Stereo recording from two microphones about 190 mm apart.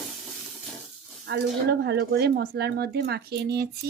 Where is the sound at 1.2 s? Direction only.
60° right (ahead or behind).